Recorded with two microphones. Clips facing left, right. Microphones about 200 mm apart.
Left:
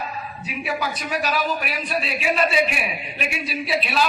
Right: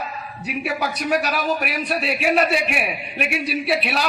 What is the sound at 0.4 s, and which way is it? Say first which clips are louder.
Speech: right 2 dB; 65° right (ahead or behind).